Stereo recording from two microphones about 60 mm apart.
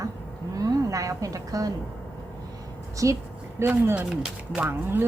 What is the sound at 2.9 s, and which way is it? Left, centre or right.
Speech, right.